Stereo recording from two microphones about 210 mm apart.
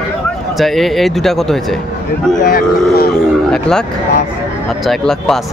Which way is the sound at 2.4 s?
45° left (ahead or behind).